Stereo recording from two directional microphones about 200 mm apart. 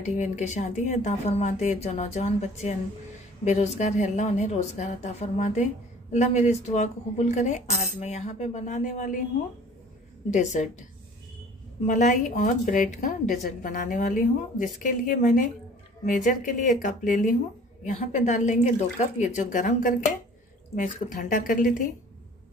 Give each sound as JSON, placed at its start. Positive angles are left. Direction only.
{"t": 0.0, "sound": "a woman's voice", "side_deg": 35}
{"t": 10.3, "sound": "a woman's voice", "side_deg": 35}
{"t": 11.8, "sound": "a woman's voice", "side_deg": 40}